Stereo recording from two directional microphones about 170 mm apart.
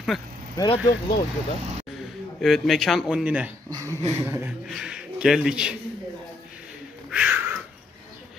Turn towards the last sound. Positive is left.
turn(degrees=-10)  # may be behind; listen again after turning